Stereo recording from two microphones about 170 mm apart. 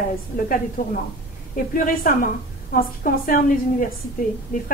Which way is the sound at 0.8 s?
55° left (ahead or behind).